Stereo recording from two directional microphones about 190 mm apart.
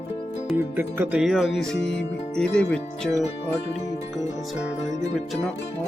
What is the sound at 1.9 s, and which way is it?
Music, 70° left (ahead or behind).